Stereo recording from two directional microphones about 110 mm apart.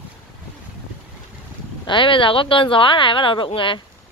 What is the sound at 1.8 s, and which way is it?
A woman's voice, 50° left (ahead or behind).